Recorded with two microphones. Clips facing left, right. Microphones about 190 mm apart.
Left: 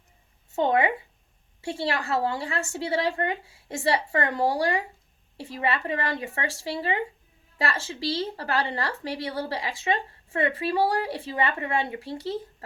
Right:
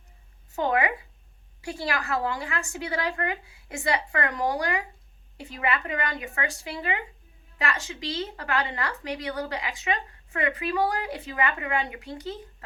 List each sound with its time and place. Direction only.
0.5 s a woman's voice: 25° left (ahead or behind)